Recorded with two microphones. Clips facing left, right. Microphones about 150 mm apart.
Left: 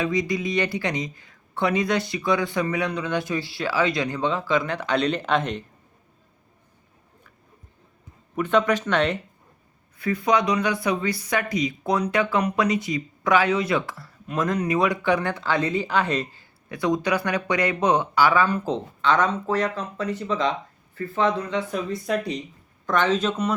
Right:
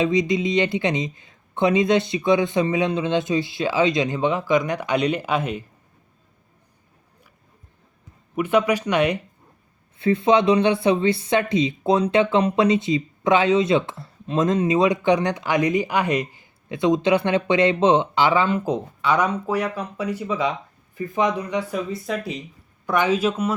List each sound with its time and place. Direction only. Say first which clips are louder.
0.0 s speech: right 4 dB; 20° right (ahead or behind)
8.4 s speech: right 1 dB; 10° right (ahead or behind)
10.0 s speech: right 4 dB; 25° right (ahead or behind); by 23.6 s 10° right (ahead or behind)